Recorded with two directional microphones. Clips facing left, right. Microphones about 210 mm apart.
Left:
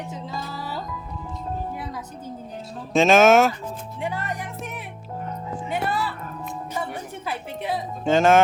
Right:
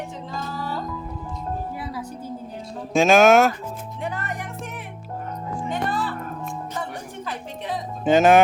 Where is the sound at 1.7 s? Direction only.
10° right (ahead or behind).